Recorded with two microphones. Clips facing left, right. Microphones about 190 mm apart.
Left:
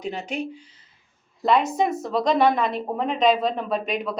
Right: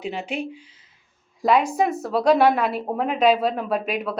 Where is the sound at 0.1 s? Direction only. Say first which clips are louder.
Left 1 dB; 5° right (ahead or behind).